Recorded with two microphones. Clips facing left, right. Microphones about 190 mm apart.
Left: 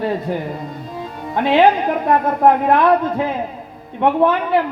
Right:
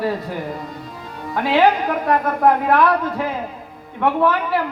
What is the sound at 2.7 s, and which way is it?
Speech, 20° left (ahead or behind).